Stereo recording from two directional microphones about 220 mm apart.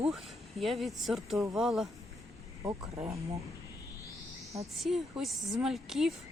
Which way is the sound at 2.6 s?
15° right (ahead or behind).